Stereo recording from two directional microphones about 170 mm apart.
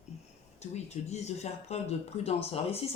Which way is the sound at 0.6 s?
40° left (ahead or behind).